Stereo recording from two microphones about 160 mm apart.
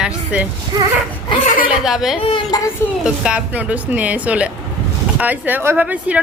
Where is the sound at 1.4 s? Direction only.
55° left (ahead or behind).